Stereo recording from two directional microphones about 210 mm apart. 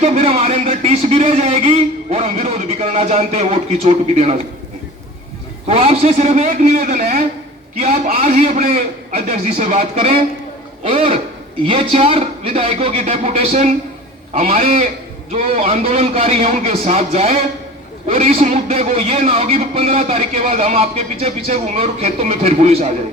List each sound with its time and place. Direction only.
0.0 s a man's voice: 30° right (ahead or behind)
5.6 s a man's voice: 30° right (ahead or behind)